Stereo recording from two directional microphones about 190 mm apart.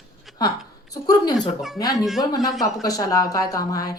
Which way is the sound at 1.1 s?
20° left (ahead or behind).